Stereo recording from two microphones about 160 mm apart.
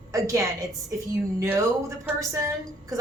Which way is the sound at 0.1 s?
20° right (ahead or behind).